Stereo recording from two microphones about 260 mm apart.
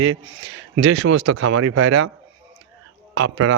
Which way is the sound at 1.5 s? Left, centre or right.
Right.